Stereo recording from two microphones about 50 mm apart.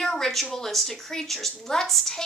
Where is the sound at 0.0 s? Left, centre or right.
Centre.